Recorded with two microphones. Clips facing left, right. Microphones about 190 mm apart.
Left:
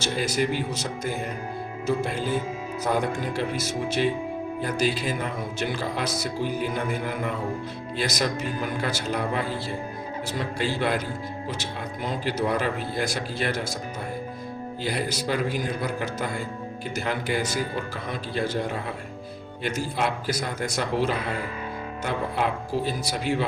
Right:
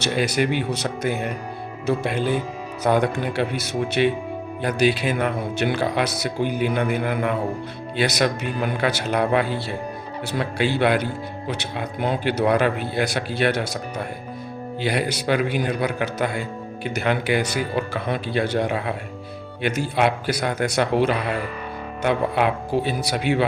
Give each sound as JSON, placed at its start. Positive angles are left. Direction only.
{"t": 0.0, "sound": "a man's voice", "side_deg": -70}
{"t": 14.8, "sound": "a man's voice", "side_deg": -70}